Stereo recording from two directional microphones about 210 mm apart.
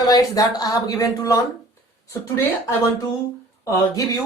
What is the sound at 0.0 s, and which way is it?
Speech, 15° left (ahead or behind).